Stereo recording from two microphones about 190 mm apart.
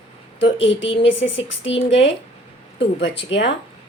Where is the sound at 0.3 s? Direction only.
70° left (ahead or behind).